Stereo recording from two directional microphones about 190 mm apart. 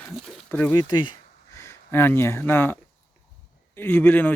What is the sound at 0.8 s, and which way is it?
Speech, 20° left (ahead or behind).